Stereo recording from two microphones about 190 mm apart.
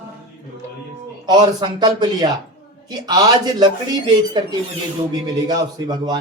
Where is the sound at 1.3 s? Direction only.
20° right (ahead or behind).